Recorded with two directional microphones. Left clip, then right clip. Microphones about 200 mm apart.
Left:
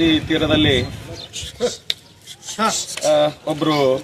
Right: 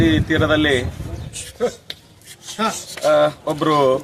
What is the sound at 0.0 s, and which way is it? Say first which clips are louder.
Speech: even; 5° left (ahead or behind).